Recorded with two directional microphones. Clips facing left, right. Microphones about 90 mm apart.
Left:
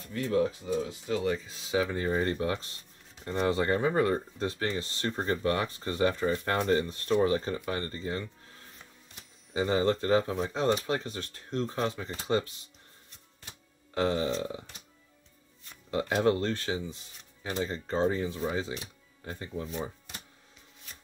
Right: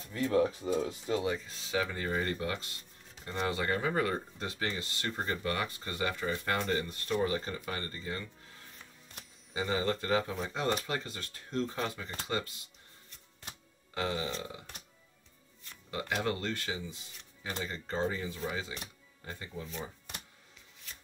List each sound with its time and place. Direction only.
0.1 s speech: 35° right (ahead or behind)
1.2 s speech: centre (ahead or behind)
1.7 s speech: 15° left (ahead or behind)
9.6 s speech: 35° left (ahead or behind)
13.9 s speech: 45° left (ahead or behind)
15.9 s speech: 35° left (ahead or behind)
17.9 s speech: 35° left (ahead or behind)